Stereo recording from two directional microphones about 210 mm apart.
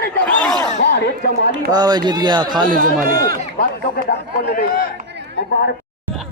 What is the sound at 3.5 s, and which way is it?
Speech, 50° left (ahead or behind).